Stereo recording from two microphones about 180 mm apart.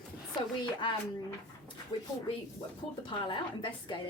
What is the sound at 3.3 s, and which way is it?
Speech, 25° left (ahead or behind).